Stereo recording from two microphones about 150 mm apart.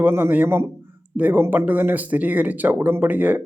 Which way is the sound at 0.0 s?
10° right (ahead or behind).